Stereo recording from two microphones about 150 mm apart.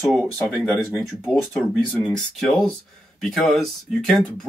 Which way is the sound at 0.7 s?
15° left (ahead or behind).